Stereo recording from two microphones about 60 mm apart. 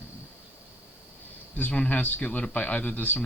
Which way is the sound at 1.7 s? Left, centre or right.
Left.